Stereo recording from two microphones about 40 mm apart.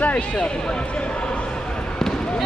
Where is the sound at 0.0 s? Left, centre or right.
Left.